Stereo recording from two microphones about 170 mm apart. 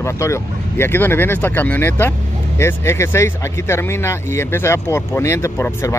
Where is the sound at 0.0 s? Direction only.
15° left (ahead or behind).